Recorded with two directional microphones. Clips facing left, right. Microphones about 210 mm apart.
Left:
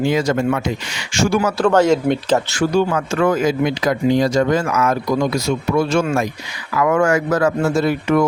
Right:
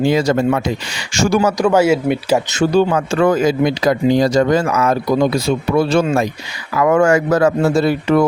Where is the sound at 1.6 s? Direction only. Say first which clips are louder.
Left 2 dB; 10° right (ahead or behind).